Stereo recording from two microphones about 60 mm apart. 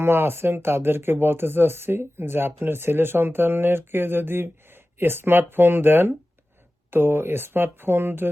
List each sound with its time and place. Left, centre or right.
0.0 s speech: right